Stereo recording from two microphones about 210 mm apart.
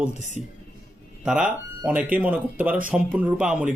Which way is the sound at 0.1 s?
30° left (ahead or behind).